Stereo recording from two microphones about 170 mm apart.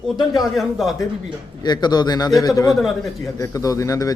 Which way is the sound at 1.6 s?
25° left (ahead or behind).